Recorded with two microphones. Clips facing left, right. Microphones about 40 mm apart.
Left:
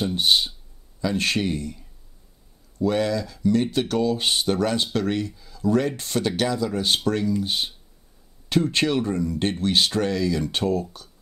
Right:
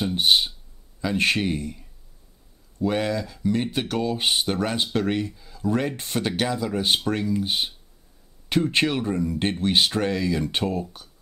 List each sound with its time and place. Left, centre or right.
0.0 s speech: centre